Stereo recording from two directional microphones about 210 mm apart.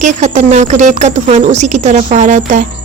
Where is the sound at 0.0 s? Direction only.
35° right (ahead or behind).